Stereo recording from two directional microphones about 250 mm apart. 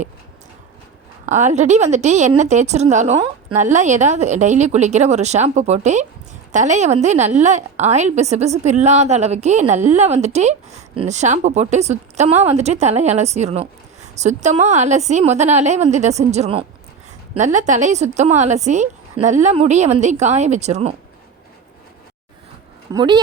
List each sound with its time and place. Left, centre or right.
1.2 s speech: right
22.9 s speech: centre